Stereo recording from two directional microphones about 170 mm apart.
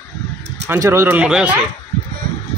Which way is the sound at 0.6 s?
15° right (ahead or behind).